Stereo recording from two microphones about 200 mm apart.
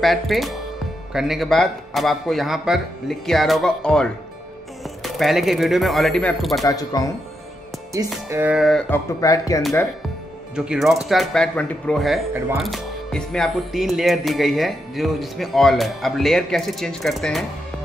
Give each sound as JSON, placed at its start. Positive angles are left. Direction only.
{"t": 0.0, "sound": "speech", "side_deg": 0}
{"t": 6.6, "sound": "a man's voice", "side_deg": 15}
{"t": 8.3, "sound": "speech", "side_deg": -10}
{"t": 8.9, "sound": "a man's voice", "side_deg": 15}
{"t": 10.5, "sound": "speech", "side_deg": -5}